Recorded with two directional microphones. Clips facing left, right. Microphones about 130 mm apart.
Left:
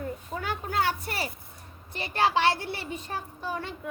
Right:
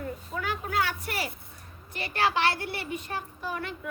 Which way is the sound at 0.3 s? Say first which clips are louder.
Even; 35° left (ahead or behind).